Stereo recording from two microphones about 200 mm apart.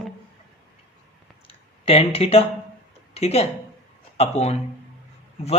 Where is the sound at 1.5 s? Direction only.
30° left (ahead or behind).